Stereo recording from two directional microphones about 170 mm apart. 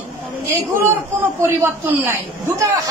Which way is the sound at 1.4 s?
10° right (ahead or behind).